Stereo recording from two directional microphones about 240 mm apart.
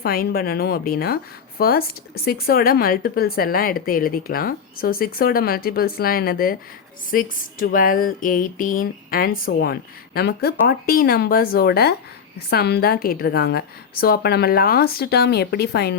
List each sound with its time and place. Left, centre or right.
0.0 s a woman's voice: left